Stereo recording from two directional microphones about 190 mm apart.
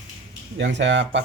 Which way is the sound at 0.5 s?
70° right (ahead or behind).